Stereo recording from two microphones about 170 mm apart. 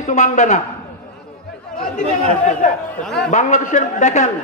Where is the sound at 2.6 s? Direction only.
50° left (ahead or behind).